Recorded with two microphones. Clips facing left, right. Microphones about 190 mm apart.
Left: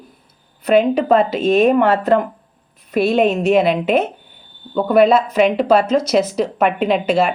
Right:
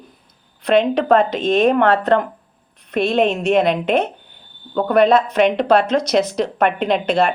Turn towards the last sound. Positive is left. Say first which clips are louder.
# left 1 dB
turn(degrees=5)  # may be behind; listen again after turning